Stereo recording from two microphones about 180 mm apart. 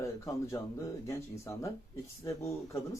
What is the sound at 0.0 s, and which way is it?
Speech, 15° left (ahead or behind).